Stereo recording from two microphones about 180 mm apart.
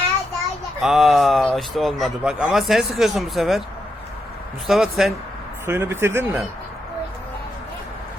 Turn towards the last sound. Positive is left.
turn(degrees=-10)  # may be behind; listen again after turning